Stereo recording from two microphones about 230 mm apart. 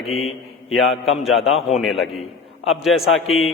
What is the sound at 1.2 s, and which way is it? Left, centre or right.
A man's voice, centre.